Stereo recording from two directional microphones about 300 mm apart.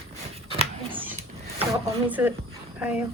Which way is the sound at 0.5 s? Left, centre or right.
Centre.